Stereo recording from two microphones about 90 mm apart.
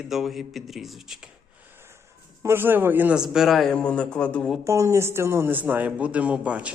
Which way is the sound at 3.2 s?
5° right (ahead or behind).